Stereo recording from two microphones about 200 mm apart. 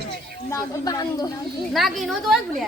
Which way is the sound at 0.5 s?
15° left (ahead or behind).